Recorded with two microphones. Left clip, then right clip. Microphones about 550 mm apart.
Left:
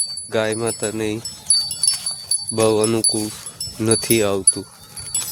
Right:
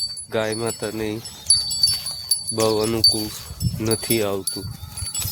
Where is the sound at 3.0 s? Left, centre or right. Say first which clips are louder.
Right 4 dB; right.